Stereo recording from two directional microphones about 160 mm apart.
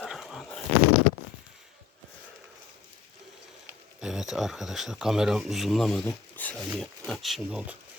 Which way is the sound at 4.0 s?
5° right (ahead or behind).